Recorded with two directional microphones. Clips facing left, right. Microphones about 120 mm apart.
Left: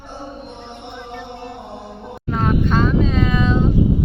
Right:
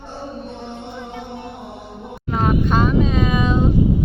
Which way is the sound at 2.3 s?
10° right (ahead or behind).